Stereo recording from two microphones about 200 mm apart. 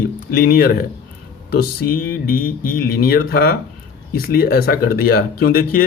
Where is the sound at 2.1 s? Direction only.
45° left (ahead or behind).